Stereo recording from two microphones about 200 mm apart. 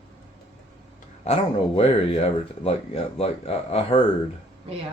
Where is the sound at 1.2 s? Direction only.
30° left (ahead or behind).